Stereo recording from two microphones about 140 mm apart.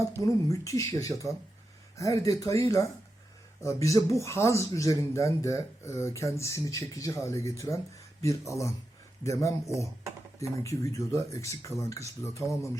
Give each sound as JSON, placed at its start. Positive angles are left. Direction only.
{"t": 0.0, "sound": "speech", "side_deg": 20}